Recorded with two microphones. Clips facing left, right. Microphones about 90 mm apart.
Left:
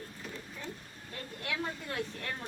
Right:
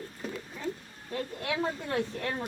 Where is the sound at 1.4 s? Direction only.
30° right (ahead or behind).